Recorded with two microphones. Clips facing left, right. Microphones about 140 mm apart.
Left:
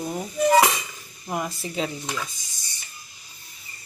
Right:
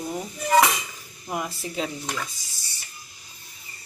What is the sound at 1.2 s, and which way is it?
Speech, centre (ahead or behind).